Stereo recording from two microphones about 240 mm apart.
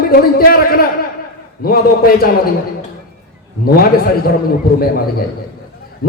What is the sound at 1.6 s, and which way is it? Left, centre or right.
Speech, left.